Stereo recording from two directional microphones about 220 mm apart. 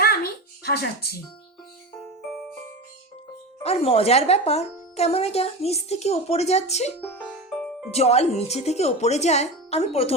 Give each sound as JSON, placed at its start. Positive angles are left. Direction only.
{"t": 0.0, "sound": "a sound", "side_deg": 45}
{"t": 3.6, "sound": "speech", "side_deg": 25}
{"t": 7.0, "sound": "speech", "side_deg": 10}
{"t": 7.3, "sound": "music", "side_deg": -5}
{"t": 7.9, "sound": "speech", "side_deg": 30}